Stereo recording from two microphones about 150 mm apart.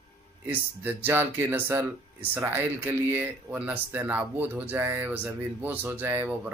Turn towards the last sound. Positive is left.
turn(degrees=-10)  # may be behind; listen again after turning